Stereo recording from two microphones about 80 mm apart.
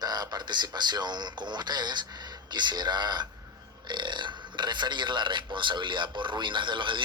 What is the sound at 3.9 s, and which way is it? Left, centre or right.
A man's voice, right.